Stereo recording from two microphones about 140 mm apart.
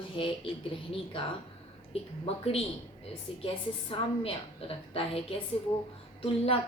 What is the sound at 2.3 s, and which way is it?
Speech, 45° left (ahead or behind).